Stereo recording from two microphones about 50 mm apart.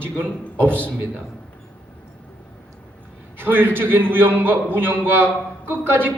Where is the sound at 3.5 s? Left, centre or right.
Right.